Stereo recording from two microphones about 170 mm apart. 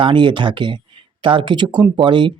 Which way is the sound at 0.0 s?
30° right (ahead or behind).